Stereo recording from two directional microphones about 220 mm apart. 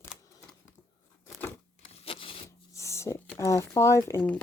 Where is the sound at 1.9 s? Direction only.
25° left (ahead or behind).